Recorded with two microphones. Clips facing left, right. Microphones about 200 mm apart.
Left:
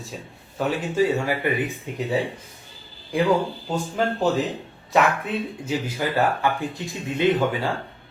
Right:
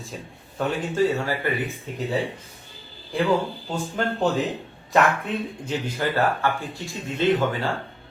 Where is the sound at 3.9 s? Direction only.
5° left (ahead or behind).